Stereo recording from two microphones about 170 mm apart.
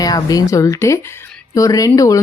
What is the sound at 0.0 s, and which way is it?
A woman's voice, 20° left (ahead or behind).